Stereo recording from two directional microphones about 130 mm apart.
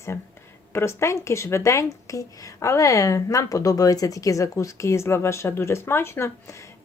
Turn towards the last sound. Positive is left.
turn(degrees=20)  # may be behind; listen again after turning